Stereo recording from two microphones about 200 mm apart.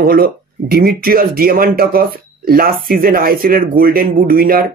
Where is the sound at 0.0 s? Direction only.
45° right (ahead or behind).